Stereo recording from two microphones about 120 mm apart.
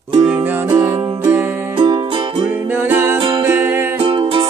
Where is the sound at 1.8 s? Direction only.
40° right (ahead or behind).